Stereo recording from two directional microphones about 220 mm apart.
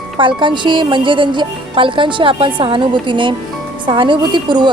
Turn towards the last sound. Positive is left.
turn(degrees=-20)  # may be behind; listen again after turning